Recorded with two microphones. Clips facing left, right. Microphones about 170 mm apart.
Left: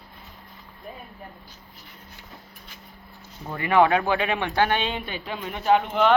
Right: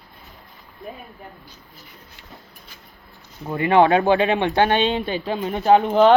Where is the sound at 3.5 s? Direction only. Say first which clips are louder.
Right 4 dB; 25° right (ahead or behind).